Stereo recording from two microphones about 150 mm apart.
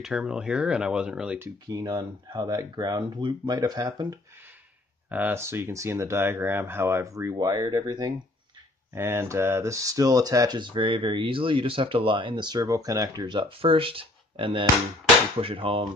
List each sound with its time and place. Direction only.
0.0 s speech: 5° right (ahead or behind)
1.7 s speech: 30° right (ahead or behind)
5.1 s speech: 15° right (ahead or behind); by 8.1 s 30° right (ahead or behind)
8.9 s speech: 15° right (ahead or behind); by 15.9 s 35° right (ahead or behind)